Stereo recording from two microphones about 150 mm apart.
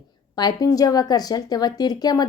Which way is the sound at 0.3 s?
25° left (ahead or behind).